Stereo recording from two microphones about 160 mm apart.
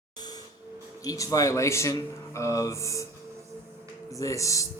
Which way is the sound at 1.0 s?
20° left (ahead or behind).